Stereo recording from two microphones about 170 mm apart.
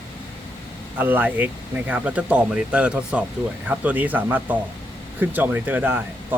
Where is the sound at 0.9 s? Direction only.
10° right (ahead or behind).